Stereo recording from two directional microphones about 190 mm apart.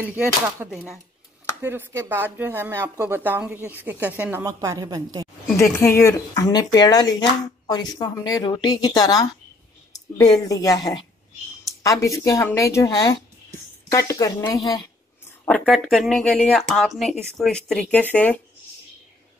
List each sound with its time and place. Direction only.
0.0 s speech: 5° right (ahead or behind)
5.6 s speech: 15° left (ahead or behind)
15.4 s speech: 5° left (ahead or behind)